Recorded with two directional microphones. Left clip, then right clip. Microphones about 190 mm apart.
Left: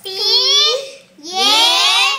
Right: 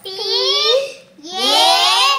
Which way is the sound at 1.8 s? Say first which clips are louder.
Even; 55° right (ahead or behind).